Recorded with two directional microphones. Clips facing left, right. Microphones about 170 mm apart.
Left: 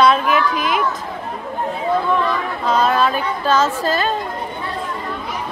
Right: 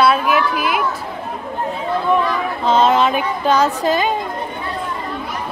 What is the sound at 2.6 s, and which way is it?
Speech, 25° right (ahead or behind).